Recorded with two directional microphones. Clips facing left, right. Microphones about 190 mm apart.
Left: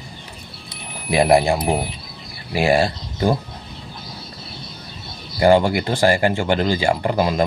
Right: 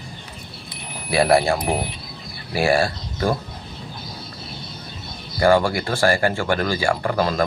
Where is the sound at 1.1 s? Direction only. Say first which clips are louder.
Left 2 dB; 20° left (ahead or behind).